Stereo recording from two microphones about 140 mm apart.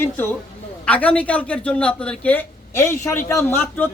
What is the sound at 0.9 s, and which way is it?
A man's voice, 10° left (ahead or behind).